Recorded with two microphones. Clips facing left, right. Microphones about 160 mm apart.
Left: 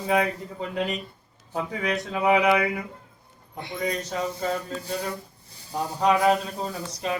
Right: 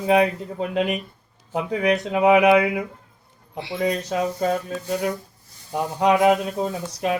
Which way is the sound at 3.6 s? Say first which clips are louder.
Right 5 dB; 90° right.